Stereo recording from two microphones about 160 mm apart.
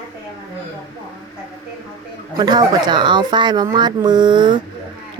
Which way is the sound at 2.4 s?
25° right (ahead or behind).